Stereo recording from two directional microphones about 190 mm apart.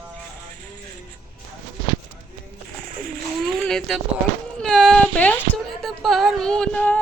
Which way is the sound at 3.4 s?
Centre (ahead or behind).